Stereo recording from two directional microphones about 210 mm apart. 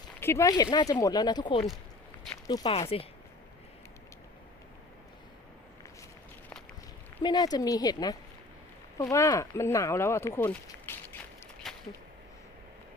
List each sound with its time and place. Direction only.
0.2 s speech: 10° left (ahead or behind)
7.2 s speech: 20° left (ahead or behind)
11.6 s a sound: centre (ahead or behind)